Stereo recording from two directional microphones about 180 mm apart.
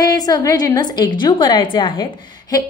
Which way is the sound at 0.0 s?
20° left (ahead or behind).